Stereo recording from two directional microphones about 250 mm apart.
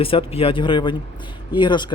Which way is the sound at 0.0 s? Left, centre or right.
Left.